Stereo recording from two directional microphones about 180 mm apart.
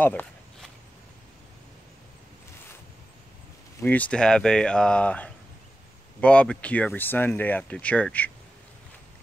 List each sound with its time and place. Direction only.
0.0 s walk: 10° left (ahead or behind)
3.8 s speech: 10° left (ahead or behind)